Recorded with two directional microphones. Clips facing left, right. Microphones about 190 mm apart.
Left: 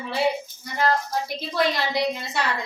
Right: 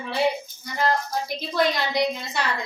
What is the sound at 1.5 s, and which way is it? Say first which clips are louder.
Speech: right 1 dB; centre (ahead or behind).